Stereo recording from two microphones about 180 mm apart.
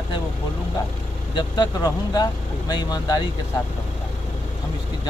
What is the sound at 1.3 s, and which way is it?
Speech, 20° left (ahead or behind).